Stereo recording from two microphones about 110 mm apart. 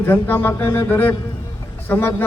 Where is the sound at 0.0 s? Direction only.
20° left (ahead or behind).